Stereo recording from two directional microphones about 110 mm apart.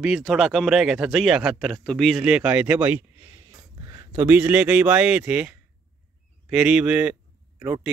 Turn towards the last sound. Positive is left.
turn(degrees=-15)  # may be behind; listen again after turning